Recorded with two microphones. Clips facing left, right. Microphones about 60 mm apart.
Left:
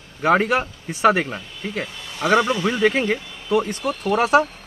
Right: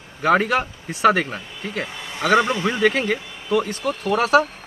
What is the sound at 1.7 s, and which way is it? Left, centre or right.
A man's voice, right.